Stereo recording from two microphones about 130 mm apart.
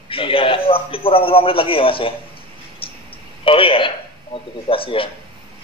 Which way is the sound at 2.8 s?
40° left (ahead or behind).